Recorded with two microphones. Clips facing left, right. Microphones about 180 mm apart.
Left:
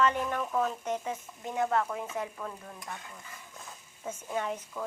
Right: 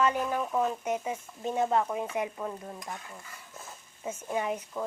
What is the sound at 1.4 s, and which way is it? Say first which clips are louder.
Stir: right 2 dB; 20° right (ahead or behind).